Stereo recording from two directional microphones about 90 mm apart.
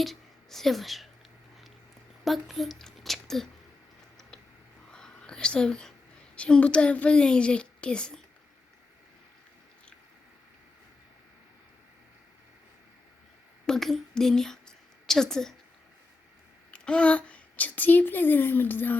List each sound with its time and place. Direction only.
0.0 s a woman's voice: centre (ahead or behind)
2.2 s speech: centre (ahead or behind)
4.9 s whispering: 10° left (ahead or behind)
6.3 s a woman's voice: 15° left (ahead or behind)
13.7 s speech: 5° left (ahead or behind)
16.7 s a woman's voice: 10° left (ahead or behind)